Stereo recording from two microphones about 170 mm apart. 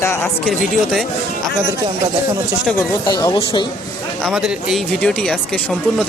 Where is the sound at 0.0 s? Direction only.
15° left (ahead or behind).